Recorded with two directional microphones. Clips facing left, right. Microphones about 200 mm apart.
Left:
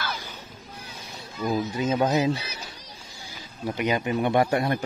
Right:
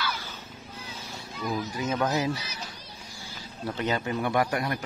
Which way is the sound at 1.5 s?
25° left (ahead or behind).